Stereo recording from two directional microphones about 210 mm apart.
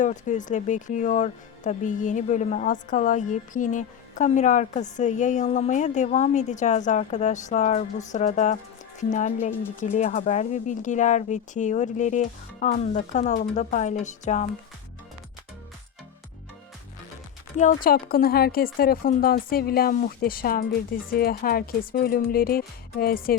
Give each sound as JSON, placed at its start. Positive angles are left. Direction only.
{"t": 0.0, "sound": "speech", "side_deg": 35}
{"t": 17.6, "sound": "speech", "side_deg": 40}